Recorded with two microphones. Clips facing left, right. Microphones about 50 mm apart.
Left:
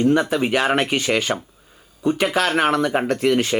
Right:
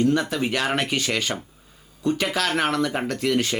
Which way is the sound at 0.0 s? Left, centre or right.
Left.